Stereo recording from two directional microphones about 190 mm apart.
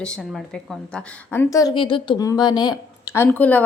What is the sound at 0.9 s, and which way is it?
Speech, 15° left (ahead or behind).